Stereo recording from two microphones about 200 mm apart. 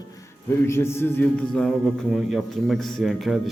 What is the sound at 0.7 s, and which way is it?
A man's voice, 10° left (ahead or behind).